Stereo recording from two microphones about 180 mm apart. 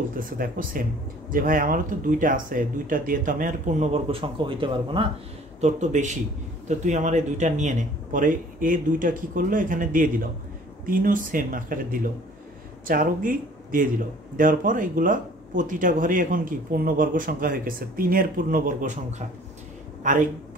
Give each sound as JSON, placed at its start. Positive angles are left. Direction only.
{"t": 0.4, "sound": "speech", "side_deg": -50}
{"t": 5.6, "sound": "a man's voice", "side_deg": -40}